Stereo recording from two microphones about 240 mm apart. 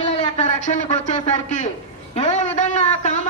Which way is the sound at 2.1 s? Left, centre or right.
Left.